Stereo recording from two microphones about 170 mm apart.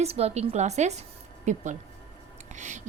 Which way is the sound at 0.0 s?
40° right (ahead or behind).